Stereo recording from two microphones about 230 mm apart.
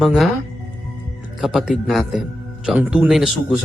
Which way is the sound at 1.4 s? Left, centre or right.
Centre.